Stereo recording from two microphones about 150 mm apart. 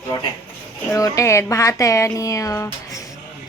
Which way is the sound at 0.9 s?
20° left (ahead or behind).